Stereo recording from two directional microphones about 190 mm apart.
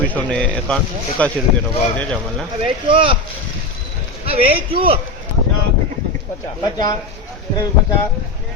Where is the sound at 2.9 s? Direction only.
30° right (ahead or behind).